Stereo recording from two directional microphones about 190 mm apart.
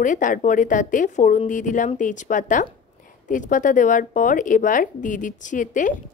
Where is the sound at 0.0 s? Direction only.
45° left (ahead or behind).